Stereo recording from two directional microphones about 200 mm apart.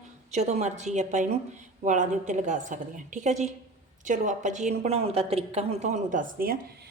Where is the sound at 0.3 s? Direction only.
35° right (ahead or behind).